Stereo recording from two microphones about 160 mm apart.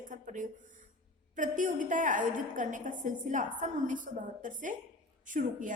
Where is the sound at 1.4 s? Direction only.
55° right (ahead or behind).